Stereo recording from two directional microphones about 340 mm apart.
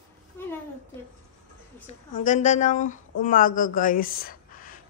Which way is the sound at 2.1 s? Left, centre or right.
Left.